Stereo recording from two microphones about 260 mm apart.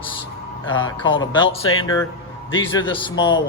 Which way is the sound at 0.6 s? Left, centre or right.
Left.